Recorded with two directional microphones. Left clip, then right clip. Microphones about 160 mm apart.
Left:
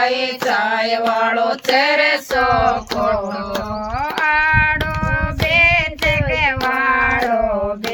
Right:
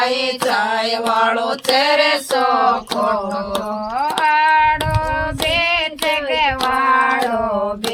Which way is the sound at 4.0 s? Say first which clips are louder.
Right 2 dB; 35° right (ahead or behind).